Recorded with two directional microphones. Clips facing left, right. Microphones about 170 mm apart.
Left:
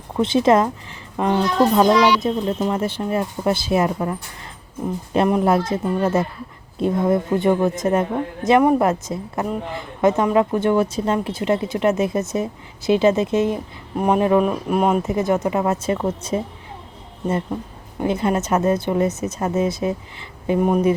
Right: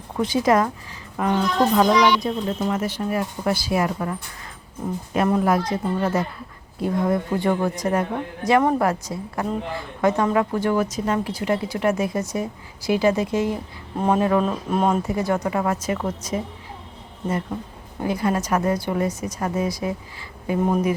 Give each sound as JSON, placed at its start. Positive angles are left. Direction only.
{"t": 0.2, "sound": "a woman's voice", "side_deg": 25}
{"t": 5.3, "sound": "a woman's voice", "side_deg": 25}
{"t": 18.0, "sound": "a woman's voice", "side_deg": 25}